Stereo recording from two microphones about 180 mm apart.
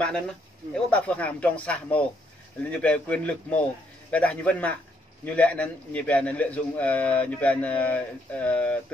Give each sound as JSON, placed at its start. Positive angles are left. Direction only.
{"t": 0.8, "sound": "a man's voice", "side_deg": 5}